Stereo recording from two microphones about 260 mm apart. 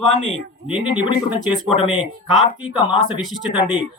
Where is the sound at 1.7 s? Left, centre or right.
Left.